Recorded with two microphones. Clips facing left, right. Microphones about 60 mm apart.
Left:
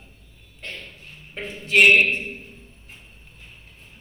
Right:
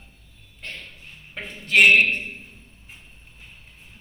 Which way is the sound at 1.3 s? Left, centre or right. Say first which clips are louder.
Even; right.